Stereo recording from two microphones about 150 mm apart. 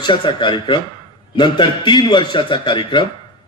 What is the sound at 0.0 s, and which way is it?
A man's voice, 30° left (ahead or behind).